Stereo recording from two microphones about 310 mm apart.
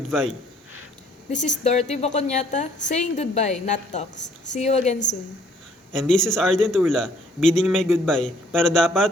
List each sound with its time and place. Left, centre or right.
0.1 s a man's voice: centre
1.3 s a woman's voice: left
5.9 s a man's voice: centre